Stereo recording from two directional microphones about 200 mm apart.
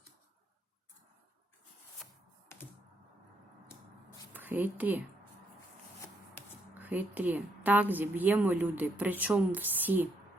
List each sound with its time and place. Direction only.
2.5 s music: 10° left (ahead or behind)
4.3 s speech: 10° right (ahead or behind)
6.7 s a woman's voice: 10° right (ahead or behind)